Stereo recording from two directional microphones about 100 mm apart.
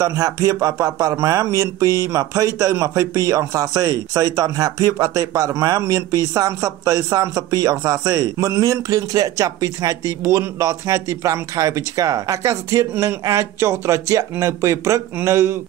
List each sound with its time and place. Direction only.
0.0 s speech: 35° right (ahead or behind)